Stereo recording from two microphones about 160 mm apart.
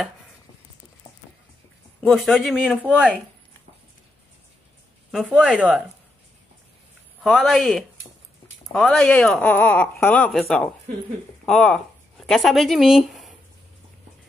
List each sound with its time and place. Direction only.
2.0 s speech: centre (ahead or behind)
5.4 s speech: 5° right (ahead or behind)
7.2 s speech: centre (ahead or behind)